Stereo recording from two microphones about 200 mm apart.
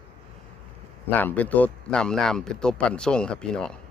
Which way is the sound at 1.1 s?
10° left (ahead or behind).